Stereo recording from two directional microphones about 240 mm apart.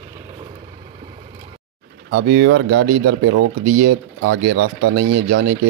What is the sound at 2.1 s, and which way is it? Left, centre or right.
Speech, right.